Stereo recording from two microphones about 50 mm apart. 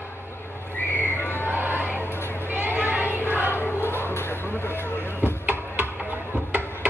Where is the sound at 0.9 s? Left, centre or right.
Left.